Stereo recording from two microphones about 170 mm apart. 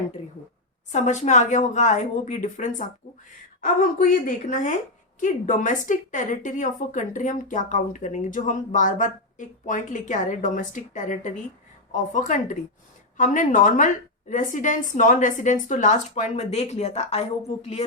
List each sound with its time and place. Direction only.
0.9 s a woman's voice: 45° left (ahead or behind)